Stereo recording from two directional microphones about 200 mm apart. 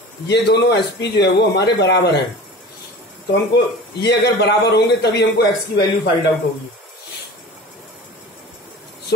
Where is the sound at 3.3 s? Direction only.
55° left (ahead or behind).